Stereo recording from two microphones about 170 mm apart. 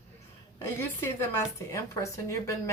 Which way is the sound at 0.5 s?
15° left (ahead or behind).